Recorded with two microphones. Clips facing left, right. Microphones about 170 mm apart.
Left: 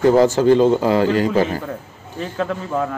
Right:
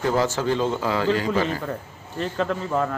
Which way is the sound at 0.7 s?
45° left (ahead or behind).